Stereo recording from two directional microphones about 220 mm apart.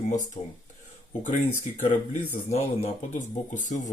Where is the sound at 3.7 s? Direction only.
35° left (ahead or behind).